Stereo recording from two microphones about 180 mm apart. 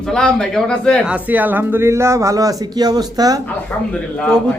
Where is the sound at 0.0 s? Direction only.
5° left (ahead or behind).